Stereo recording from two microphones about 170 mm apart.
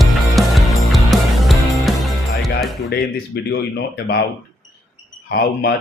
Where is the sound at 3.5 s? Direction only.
75° left (ahead or behind).